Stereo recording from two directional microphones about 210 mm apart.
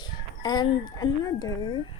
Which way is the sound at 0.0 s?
20° left (ahead or behind).